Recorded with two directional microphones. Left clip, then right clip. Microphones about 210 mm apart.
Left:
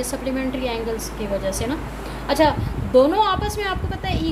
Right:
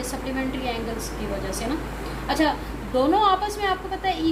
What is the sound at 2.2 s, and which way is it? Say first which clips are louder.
A woman's voice: left 5 dB; 55° left (ahead or behind).